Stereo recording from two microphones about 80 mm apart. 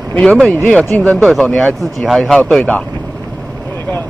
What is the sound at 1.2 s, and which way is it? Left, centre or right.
Speech, centre.